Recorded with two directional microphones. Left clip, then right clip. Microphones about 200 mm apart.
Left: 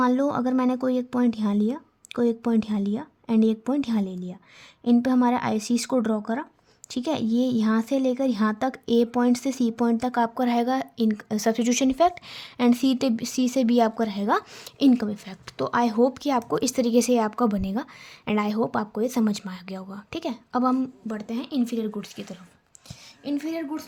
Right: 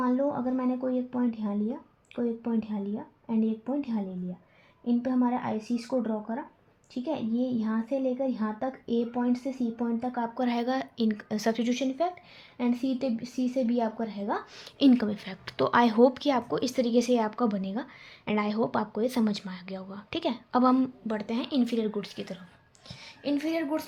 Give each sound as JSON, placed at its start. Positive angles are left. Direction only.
{"t": 0.0, "sound": "speech", "side_deg": 55}
{"t": 14.8, "sound": "speech", "side_deg": 25}